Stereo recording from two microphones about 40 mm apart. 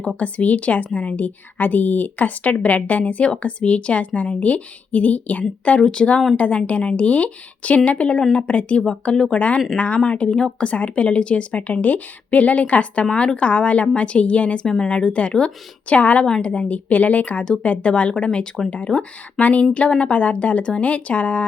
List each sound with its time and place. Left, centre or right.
0.2 s a woman's voice: left
5.8 s a woman's voice: left
6.3 s a woman's voice: left
9.7 s a woman's voice: left
14.6 s a woman's voice: centre
16.0 s a woman's voice: left
17.4 s a woman's voice: left
18.9 s speech: centre
19.4 s a woman's voice: left